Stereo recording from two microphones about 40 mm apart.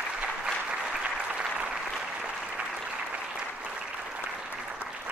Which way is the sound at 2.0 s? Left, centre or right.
Right.